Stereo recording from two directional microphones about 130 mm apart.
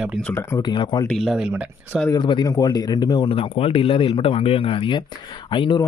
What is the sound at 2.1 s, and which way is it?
Speech, 35° left (ahead or behind).